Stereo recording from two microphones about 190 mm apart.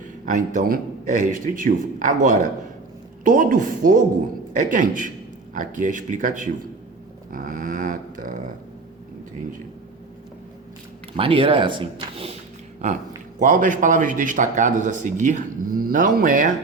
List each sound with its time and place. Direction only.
0.3 s speech: 40° right (ahead or behind)
7.3 s dog: 45° right (ahead or behind)
11.2 s a man's voice: 30° right (ahead or behind)
13.4 s speech: 45° right (ahead or behind)